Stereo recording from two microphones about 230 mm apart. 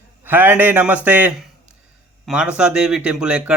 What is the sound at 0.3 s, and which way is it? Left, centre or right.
A man's voice, centre.